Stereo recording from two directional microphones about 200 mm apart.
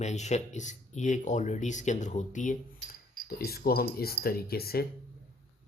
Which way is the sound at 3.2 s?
50° left (ahead or behind).